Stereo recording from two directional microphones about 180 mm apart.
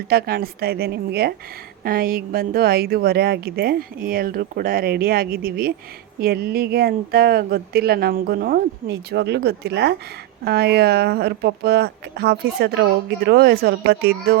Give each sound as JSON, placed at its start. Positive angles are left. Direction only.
{"t": 0.1, "sound": "speech", "side_deg": -55}